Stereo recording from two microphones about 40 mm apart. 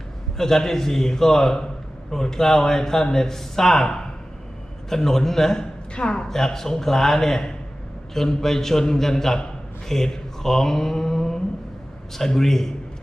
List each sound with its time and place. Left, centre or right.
0.3 s speech: centre
5.9 s speech: left
6.2 s speech: centre
9.9 s mantra: centre
12.1 s speech: centre